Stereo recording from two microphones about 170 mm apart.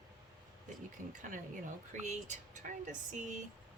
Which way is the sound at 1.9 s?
45° right (ahead or behind).